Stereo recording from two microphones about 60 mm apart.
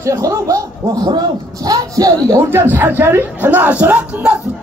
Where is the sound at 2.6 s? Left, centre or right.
Right.